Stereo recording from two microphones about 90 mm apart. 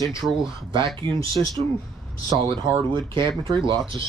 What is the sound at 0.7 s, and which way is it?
Speech, 65° right (ahead or behind).